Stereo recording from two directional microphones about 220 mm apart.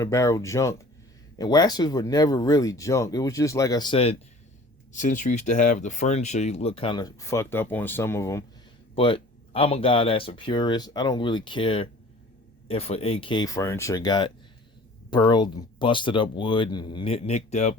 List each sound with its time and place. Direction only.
0.0 s speech: 15° left (ahead or behind)
9.0 s speech: 25° left (ahead or behind)